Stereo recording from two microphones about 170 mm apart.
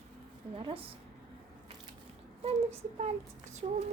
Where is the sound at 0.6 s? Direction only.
30° right (ahead or behind).